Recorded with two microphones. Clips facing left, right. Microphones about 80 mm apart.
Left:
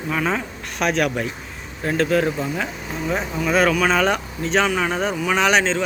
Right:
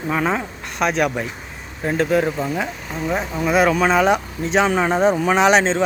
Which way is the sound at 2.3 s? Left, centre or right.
Centre.